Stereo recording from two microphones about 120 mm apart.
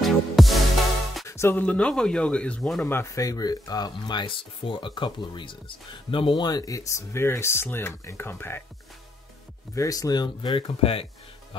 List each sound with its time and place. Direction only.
0.0 s music: centre (ahead or behind)
1.2 s speech: 20° left (ahead or behind); by 2.9 s 5° left (ahead or behind)
2.9 s speech: 25° left (ahead or behind)
9.8 s speech: 30° left (ahead or behind); by 11.1 s 50° left (ahead or behind)